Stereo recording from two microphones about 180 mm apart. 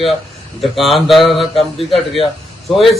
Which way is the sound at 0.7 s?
Centre (ahead or behind).